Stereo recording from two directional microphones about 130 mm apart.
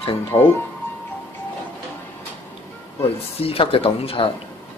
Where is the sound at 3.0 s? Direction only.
45° left (ahead or behind).